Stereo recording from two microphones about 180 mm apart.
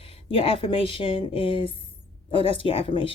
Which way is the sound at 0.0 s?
30° left (ahead or behind).